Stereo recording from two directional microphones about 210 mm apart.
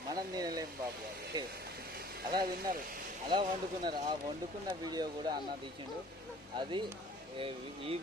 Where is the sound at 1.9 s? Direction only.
45° right (ahead or behind).